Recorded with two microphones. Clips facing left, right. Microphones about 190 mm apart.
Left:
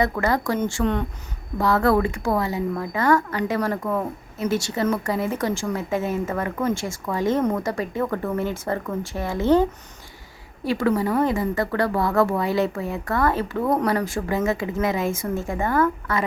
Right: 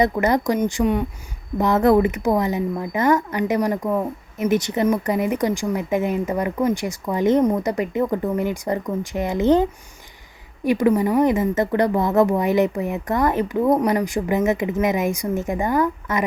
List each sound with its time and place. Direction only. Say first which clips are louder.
0.0 s speech: right 4 dB; 20° right (ahead or behind)